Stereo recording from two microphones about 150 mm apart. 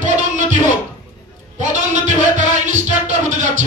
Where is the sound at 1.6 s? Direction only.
55° right (ahead or behind).